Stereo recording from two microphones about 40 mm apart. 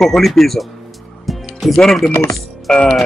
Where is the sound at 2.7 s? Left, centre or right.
Centre.